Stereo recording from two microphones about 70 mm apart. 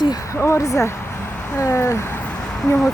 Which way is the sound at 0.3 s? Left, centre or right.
Left.